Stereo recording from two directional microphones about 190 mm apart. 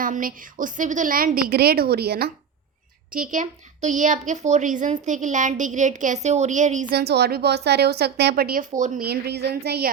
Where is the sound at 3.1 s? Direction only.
45° right (ahead or behind).